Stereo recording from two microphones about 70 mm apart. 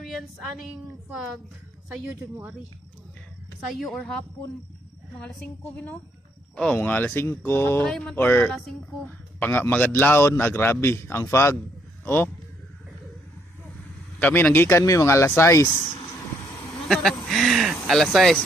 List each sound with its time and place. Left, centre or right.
0.0 s a woman's voice: centre
3.8 s speech: centre
5.7 s a man's voice: left
7.9 s speech: centre
8.1 s speech: left
8.4 s speech: centre
9.4 s a man's voice: left
14.2 s a man's voice: left
16.9 s speech: centre